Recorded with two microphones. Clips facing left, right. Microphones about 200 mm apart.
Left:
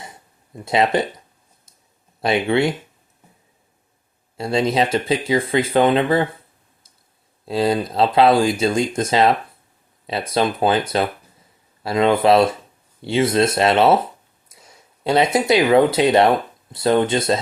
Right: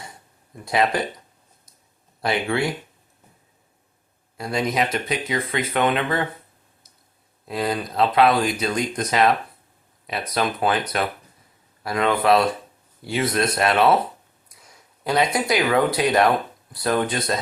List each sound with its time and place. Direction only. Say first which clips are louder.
0.5 s speech: left 4 dB; 25° left (ahead or behind)
2.2 s speech: left 5 dB; 25° left (ahead or behind)
4.4 s speech: left 5 dB; 25° left (ahead or behind)
7.4 s speech: left 6 dB; 30° left (ahead or behind)
14.5 s a sound: left 4 dB; 25° left (ahead or behind)
15.0 s speech: left 5 dB; 25° left (ahead or behind)